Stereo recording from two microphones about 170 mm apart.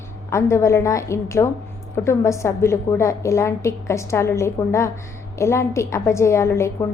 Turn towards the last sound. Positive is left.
turn(degrees=15)  # may be behind; listen again after turning